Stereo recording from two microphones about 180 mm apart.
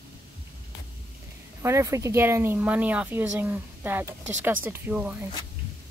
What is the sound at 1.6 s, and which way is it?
Speech, 15° right (ahead or behind).